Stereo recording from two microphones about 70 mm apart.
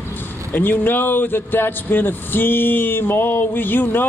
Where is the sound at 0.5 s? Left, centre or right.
Left.